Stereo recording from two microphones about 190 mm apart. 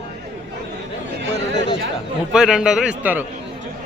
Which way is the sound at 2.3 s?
5° right (ahead or behind).